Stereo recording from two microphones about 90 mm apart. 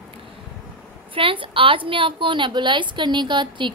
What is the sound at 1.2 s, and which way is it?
A woman's voice, 75° right (ahead or behind).